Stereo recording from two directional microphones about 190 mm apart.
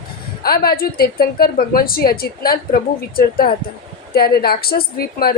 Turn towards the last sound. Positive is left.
turn(degrees=55)  # may be behind; listen again after turning